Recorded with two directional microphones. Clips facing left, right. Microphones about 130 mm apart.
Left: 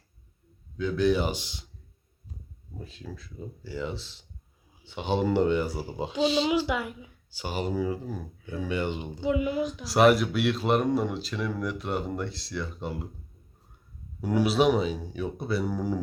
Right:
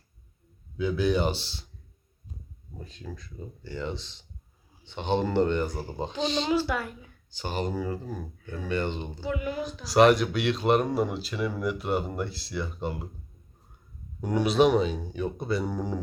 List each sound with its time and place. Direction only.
0.8 s speech: 5° right (ahead or behind)
1.3 s speech: 15° left (ahead or behind)
2.7 s speech: 5° left (ahead or behind)
9.8 s speech: 5° left (ahead or behind)
14.2 s speech: 5° left (ahead or behind)